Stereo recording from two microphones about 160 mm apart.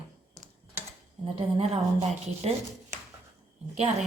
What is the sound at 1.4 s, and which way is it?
Speech, 40° right (ahead or behind).